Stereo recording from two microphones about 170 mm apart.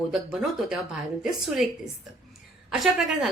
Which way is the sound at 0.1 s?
5° right (ahead or behind).